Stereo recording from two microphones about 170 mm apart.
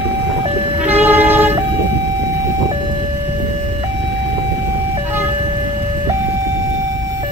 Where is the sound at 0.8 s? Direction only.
10° right (ahead or behind).